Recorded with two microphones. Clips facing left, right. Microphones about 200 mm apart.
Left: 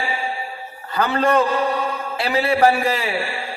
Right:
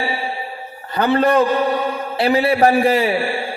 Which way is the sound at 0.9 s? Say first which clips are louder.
Right 3 dB; 30° right (ahead or behind).